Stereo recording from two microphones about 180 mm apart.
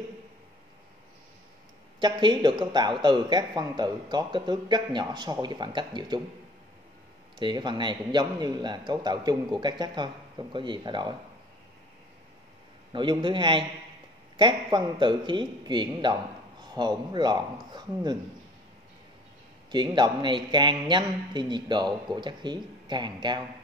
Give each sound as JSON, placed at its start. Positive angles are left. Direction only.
{"t": 2.0, "sound": "speech", "side_deg": -25}
{"t": 7.3, "sound": "speech", "side_deg": -25}
{"t": 12.9, "sound": "speech", "side_deg": -25}
{"t": 19.7, "sound": "speech", "side_deg": -25}